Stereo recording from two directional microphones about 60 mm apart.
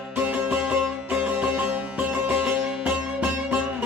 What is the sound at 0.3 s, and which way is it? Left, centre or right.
Music, right.